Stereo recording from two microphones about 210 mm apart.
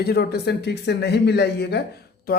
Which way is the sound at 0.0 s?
50° left (ahead or behind).